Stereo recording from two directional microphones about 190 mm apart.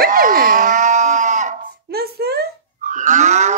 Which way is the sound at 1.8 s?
55° right (ahead or behind).